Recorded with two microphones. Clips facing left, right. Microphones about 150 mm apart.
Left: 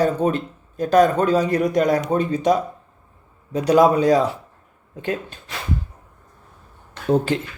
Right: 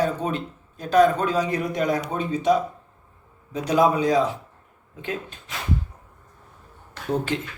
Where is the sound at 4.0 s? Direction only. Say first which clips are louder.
Left 4 dB; 40° left (ahead or behind).